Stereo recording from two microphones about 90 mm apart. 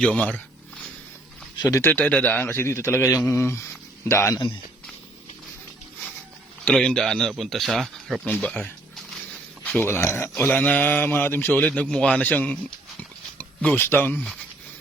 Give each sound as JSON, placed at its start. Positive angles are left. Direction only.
{"t": 0.0, "sound": "speech", "side_deg": 15}
{"t": 1.5, "sound": "speech", "side_deg": 45}
{"t": 1.8, "sound": "a man's voice", "side_deg": 20}
{"t": 6.8, "sound": "speech", "side_deg": 5}
{"t": 9.6, "sound": "speech", "side_deg": 20}